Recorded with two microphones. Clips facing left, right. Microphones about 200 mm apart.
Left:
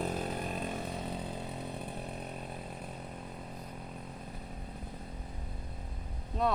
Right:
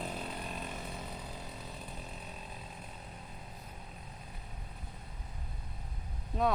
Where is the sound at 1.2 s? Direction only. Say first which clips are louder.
Left 6 dB; 60° left (ahead or behind).